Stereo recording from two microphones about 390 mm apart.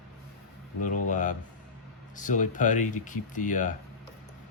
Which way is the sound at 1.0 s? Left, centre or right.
Centre.